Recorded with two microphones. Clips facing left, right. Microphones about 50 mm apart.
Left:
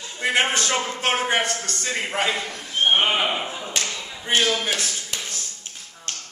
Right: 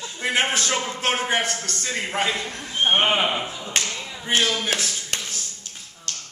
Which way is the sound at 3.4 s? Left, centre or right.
Left.